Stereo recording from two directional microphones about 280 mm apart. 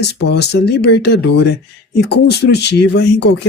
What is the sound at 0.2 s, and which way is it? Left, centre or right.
Speech, left.